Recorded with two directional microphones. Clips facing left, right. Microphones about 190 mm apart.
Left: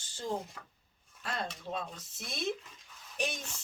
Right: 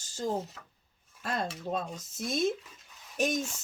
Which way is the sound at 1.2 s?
45° right (ahead or behind).